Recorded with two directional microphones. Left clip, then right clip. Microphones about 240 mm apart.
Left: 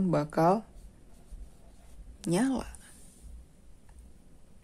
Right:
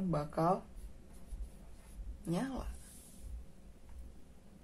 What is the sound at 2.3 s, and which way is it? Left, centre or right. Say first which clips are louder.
Speech: left 10 dB; left.